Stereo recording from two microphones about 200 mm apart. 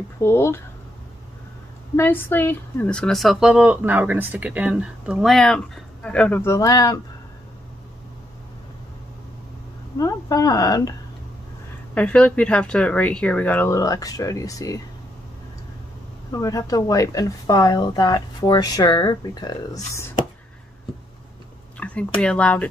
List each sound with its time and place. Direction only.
0.2 s speech: 15° left (ahead or behind)
2.0 s speech: 10° left (ahead or behind)
9.9 s speech: 15° left (ahead or behind)
11.9 s speech: 5° left (ahead or behind)
16.3 s speech: 15° left (ahead or behind)
21.7 s a sound: 5° left (ahead or behind)
22.2 s speech: 5° left (ahead or behind)